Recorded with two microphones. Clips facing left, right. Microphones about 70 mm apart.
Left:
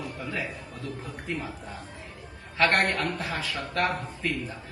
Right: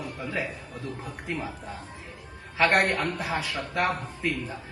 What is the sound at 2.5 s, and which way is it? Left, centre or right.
A man's voice, centre.